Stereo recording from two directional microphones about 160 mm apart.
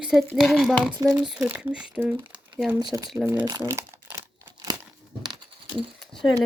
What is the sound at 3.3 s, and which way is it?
Crumpling, 20° right (ahead or behind).